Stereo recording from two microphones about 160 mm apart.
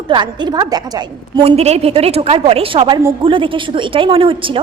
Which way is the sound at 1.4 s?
40° right (ahead or behind).